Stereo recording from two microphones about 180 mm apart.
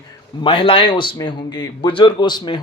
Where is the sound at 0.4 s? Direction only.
30° left (ahead or behind).